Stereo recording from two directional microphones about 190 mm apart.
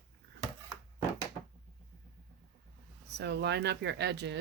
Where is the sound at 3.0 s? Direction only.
65° right (ahead or behind).